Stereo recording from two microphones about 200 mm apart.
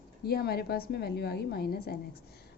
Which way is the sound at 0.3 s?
50° left (ahead or behind).